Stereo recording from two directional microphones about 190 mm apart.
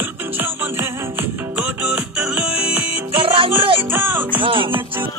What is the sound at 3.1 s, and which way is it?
Music, 25° right (ahead or behind).